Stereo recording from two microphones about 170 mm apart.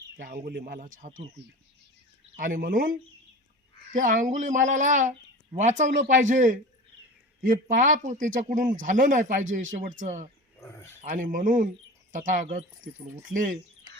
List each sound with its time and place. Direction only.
0.4 s a man's voice: 65° right (ahead or behind)
2.3 s a man's voice: 50° right (ahead or behind)
10.6 s a sound: 15° left (ahead or behind)
11.0 s speech: 50° right (ahead or behind)